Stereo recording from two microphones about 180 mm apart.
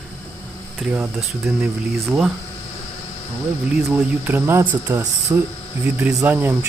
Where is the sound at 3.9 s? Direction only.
10° right (ahead or behind).